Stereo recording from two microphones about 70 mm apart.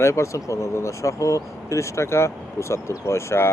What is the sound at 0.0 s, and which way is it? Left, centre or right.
Speech, left.